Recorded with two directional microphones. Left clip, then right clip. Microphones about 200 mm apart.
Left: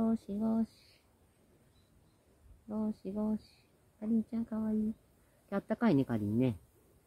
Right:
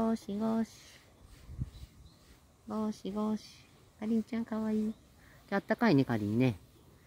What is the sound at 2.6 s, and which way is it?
Speech, 20° right (ahead or behind).